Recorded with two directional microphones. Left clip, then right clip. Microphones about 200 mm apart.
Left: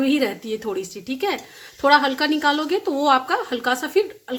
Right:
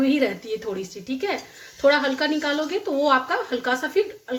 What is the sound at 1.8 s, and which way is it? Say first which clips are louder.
A woman's voice: left 3 dB; 45° left (ahead or behind).